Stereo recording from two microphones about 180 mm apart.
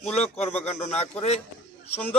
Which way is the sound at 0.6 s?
35° left (ahead or behind).